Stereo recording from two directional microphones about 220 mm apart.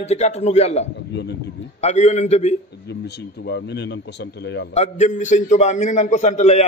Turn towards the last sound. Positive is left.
turn(degrees=30)  # may be behind; listen again after turning